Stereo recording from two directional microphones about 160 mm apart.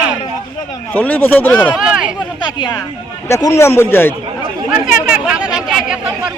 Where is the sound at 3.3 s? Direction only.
15° left (ahead or behind).